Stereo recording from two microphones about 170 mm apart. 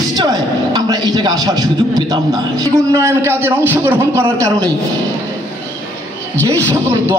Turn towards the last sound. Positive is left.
turn(degrees=-15)  # may be behind; listen again after turning